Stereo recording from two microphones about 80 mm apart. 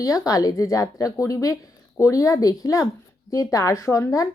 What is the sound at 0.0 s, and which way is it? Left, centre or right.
A woman's voice, left.